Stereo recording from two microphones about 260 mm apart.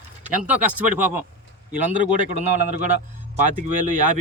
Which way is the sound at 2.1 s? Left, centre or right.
Right.